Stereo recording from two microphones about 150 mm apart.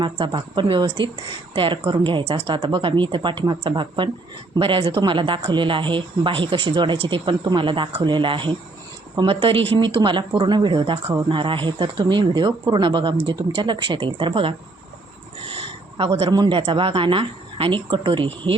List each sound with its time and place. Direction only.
0.0 s speech: 30° right (ahead or behind)
15.4 s a sound: 35° right (ahead or behind)
16.3 s speech: 30° right (ahead or behind)